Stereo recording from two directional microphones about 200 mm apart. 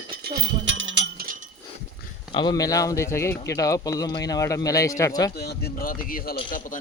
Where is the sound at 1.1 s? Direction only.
45° right (ahead or behind).